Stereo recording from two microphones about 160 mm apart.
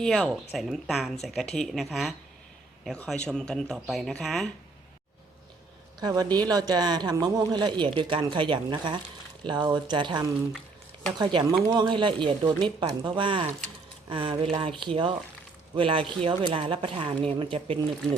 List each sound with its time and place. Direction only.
0.0 s speech: 5° left (ahead or behind)
6.0 s a man's voice: 25° right (ahead or behind)